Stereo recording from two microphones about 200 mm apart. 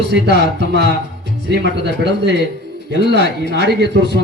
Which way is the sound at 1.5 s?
55° right (ahead or behind).